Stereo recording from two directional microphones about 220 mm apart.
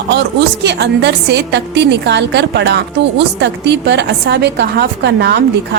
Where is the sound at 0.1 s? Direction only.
50° right (ahead or behind).